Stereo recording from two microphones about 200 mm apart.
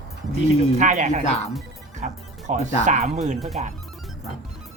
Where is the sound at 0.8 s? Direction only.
35° right (ahead or behind).